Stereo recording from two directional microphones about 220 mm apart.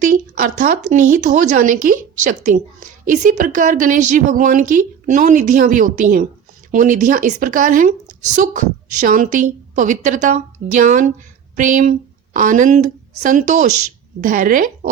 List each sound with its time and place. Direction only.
0.0 s a woman's voice: 35° right (ahead or behind)